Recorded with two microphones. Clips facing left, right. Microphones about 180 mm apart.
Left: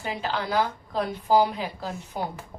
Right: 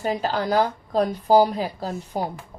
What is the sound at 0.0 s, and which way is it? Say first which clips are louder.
A woman's voice: right 6 dB; 40° right (ahead or behind).